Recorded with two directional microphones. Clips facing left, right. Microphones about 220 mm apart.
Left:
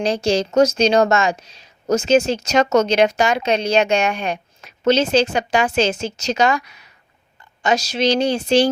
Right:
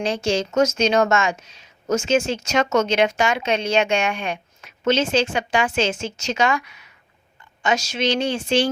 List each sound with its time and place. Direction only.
0.0 s a woman's voice: 35° left (ahead or behind)